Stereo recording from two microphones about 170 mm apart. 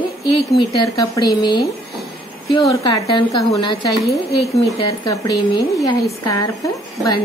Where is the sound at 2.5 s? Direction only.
25° left (ahead or behind).